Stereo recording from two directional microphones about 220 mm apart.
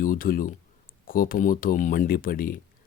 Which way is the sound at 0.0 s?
40° left (ahead or behind).